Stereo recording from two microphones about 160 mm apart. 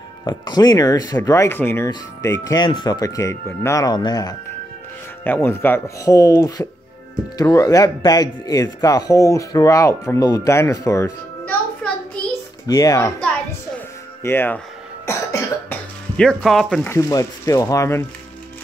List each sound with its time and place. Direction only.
0.2 s speech: 25° left (ahead or behind)
5.2 s speech: 15° left (ahead or behind)
12.6 s speech: 20° left (ahead or behind)
13.7 s music: 15° left (ahead or behind)
15.0 s cough: 15° left (ahead or behind)
16.2 s speech: 5° left (ahead or behind)
16.8 s speech: 20° left (ahead or behind)